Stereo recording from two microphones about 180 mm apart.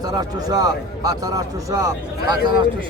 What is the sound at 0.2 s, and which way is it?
A man's voice, 20° right (ahead or behind).